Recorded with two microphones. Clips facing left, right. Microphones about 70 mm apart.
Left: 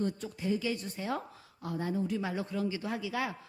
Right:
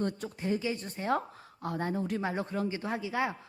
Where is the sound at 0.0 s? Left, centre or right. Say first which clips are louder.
Right 1 dB; right.